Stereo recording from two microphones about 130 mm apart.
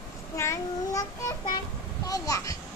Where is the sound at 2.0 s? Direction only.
25° left (ahead or behind).